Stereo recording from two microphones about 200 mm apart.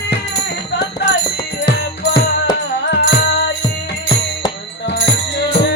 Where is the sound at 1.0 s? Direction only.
60° left (ahead or behind).